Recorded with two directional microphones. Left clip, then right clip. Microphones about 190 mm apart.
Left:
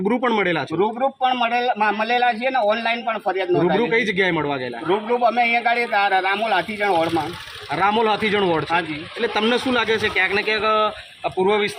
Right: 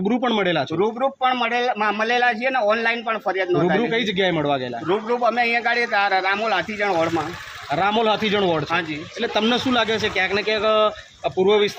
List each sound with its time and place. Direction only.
0.1 s a man's voice: 55° right (ahead or behind)
0.8 s a man's voice: 10° right (ahead or behind)
3.8 s a man's voice: 55° right (ahead or behind)
4.9 s a man's voice: 10° right (ahead or behind)
7.7 s a man's voice: 45° right (ahead or behind)